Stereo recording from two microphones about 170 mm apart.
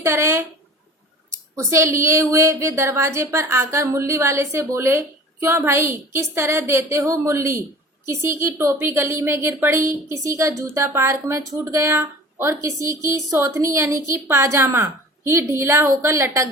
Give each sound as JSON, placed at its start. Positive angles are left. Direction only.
{"t": 0.0, "sound": "speech", "side_deg": -15}
{"t": 1.5, "sound": "speech", "side_deg": -15}